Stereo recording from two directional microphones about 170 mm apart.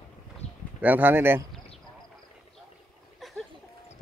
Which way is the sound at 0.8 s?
10° right (ahead or behind).